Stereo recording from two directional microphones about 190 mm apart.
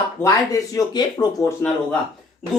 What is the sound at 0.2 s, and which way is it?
Speech, 15° left (ahead or behind).